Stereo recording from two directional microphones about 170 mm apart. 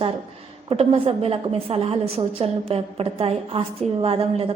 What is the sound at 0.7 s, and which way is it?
A woman's voice, 30° right (ahead or behind).